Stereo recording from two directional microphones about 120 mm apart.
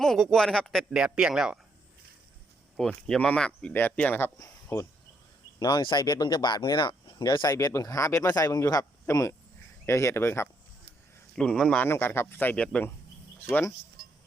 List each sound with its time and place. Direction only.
0.0 s speech: 5° left (ahead or behind)
2.7 s speech: 5° left (ahead or behind)
4.4 s speech: 25° left (ahead or behind)
5.5 s speech: 35° left (ahead or behind); by 10.5 s 20° left (ahead or behind)
11.3 s speech: 5° left (ahead or behind)
11.9 s speech: 20° left (ahead or behind)